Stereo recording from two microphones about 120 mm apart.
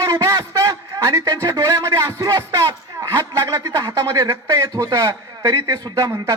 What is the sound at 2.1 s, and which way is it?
Music, 25° right (ahead or behind).